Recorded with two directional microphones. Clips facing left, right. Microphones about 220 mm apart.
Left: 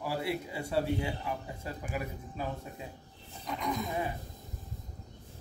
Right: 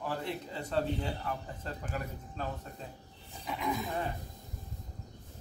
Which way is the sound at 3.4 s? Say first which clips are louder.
Even; 5° right (ahead or behind).